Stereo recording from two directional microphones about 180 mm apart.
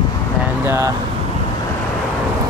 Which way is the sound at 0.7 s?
15° right (ahead or behind).